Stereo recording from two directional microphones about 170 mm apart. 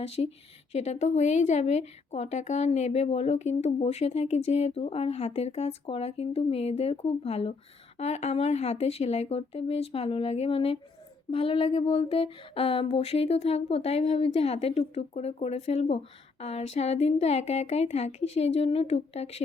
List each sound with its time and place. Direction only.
0.0 s a woman's voice: 40° left (ahead or behind)